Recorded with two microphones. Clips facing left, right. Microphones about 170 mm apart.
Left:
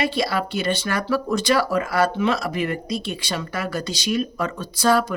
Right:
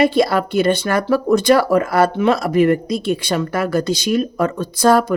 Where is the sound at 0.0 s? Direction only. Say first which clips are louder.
Right 8 dB; 50° right (ahead or behind).